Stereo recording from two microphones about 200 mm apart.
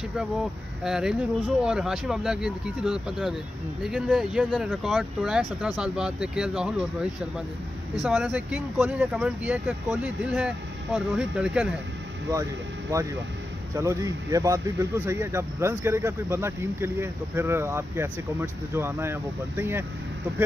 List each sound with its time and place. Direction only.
0.8 s speech: 5° right (ahead or behind)
12.9 s speech: 15° right (ahead or behind)